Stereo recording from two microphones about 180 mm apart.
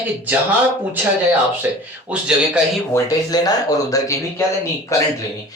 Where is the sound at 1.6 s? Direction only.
10° right (ahead or behind).